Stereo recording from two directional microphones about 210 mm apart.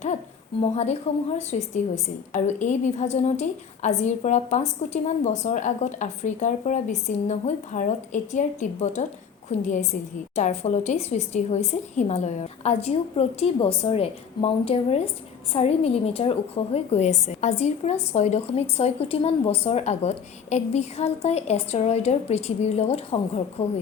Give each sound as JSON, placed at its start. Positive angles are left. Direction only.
{"t": 1.1, "sound": "a woman's voice", "side_deg": 30}